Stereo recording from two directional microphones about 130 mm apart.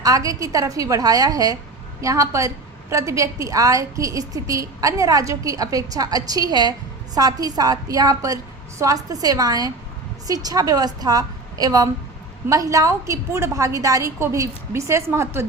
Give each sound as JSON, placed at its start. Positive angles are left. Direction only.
{"t": 0.0, "sound": "a woman's voice", "side_deg": -25}